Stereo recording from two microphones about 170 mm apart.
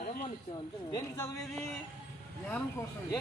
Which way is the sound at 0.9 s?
20° left (ahead or behind).